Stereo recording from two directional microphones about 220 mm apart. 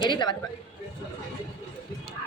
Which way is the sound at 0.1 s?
20° left (ahead or behind).